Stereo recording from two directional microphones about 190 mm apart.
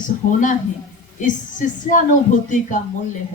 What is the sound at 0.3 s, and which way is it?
A woman's voice, 45° left (ahead or behind).